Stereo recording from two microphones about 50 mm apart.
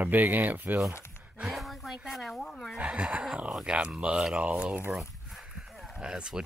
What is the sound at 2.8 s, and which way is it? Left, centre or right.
Speech, centre.